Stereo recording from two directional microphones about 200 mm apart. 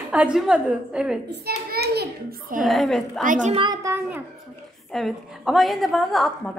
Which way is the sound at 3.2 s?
40° right (ahead or behind).